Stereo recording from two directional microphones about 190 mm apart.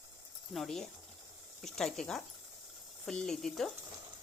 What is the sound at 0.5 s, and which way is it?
Speech, centre (ahead or behind).